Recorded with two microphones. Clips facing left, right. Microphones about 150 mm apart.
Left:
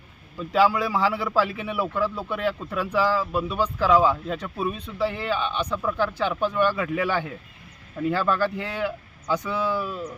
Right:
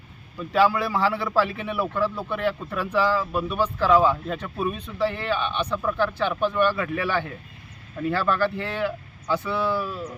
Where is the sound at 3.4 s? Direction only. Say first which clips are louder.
Right 1 dB; 10° right (ahead or behind).